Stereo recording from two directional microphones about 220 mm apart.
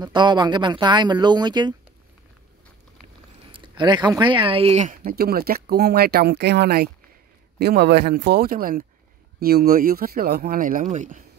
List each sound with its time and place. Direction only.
0.0 s speech: 20° right (ahead or behind)
3.5 s speech: 20° right (ahead or behind)